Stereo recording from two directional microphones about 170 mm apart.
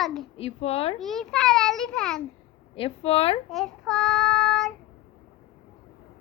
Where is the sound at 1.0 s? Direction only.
Centre (ahead or behind).